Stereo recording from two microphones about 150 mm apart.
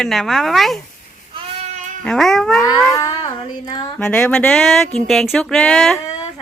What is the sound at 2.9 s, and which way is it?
Child singing, 20° left (ahead or behind).